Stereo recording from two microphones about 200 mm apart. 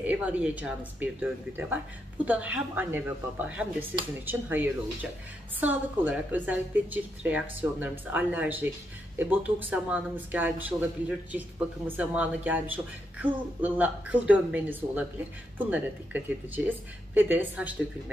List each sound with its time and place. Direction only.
0.0 s speech: 5° right (ahead or behind)